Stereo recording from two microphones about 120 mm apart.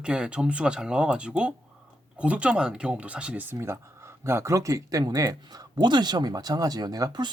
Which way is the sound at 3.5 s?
20° right (ahead or behind).